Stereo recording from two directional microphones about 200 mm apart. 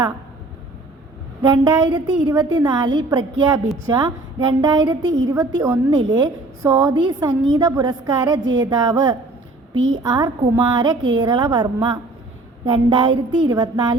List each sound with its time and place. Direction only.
1.4 s a woman's voice: 20° right (ahead or behind)